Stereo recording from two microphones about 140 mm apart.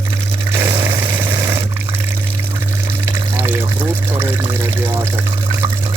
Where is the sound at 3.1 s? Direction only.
15° right (ahead or behind).